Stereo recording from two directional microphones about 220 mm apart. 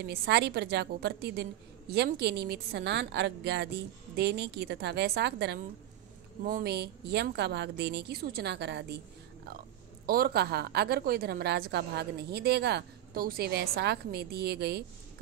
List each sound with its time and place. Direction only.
0.0 s a woman's voice: 45° right (ahead or behind)
10.0 s a woman's voice: 45° right (ahead or behind)